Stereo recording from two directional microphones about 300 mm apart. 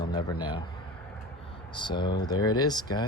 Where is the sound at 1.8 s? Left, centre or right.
Centre.